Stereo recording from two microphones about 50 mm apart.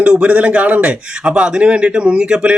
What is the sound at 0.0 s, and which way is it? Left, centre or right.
A man's voice, right.